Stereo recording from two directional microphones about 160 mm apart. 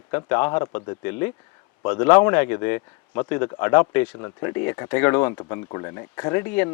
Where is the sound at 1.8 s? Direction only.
15° left (ahead or behind).